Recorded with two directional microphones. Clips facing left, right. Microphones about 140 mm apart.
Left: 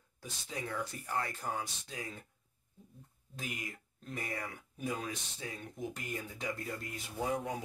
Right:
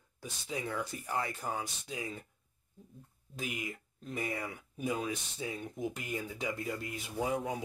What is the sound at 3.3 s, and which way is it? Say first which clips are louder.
Speech: right 4 dB; 5° right (ahead or behind).